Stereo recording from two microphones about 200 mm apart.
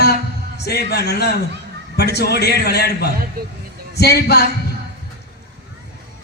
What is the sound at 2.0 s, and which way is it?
A man's voice, 55° left (ahead or behind).